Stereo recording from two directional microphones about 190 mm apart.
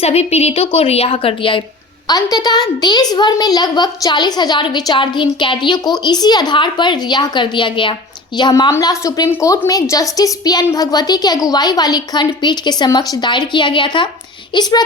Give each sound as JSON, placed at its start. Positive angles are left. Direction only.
{"t": 0.0, "sound": "a woman's voice", "side_deg": 35}